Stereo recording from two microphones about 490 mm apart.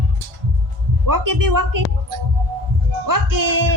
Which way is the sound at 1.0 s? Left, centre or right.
Right.